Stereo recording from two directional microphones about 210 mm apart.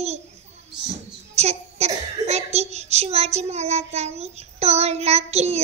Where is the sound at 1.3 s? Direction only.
30° right (ahead or behind).